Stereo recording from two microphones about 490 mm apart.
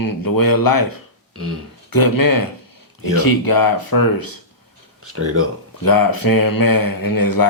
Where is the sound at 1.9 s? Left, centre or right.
Left.